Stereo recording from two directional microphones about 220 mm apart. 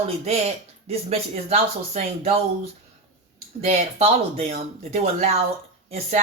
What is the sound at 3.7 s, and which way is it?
Speech, 30° right (ahead or behind).